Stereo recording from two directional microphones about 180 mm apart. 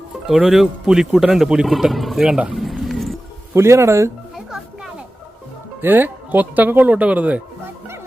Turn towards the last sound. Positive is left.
turn(degrees=-10)  # may be behind; listen again after turning